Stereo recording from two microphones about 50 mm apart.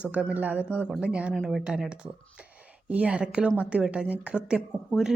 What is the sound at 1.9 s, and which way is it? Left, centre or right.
Speech, right.